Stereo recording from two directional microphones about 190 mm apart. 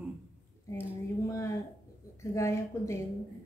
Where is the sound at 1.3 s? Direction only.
15° left (ahead or behind).